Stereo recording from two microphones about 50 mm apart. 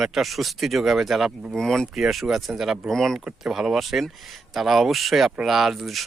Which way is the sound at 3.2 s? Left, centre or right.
Centre.